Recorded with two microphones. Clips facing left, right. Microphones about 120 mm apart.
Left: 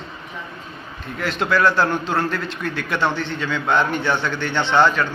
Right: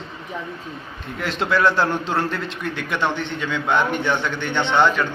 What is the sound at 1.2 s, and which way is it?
A man's voice, 25° right (ahead or behind).